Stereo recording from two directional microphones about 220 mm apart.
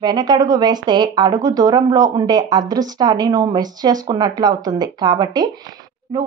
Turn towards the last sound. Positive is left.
turn(degrees=-15)  # may be behind; listen again after turning